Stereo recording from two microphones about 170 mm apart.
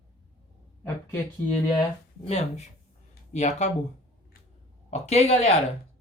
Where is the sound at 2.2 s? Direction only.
35° left (ahead or behind).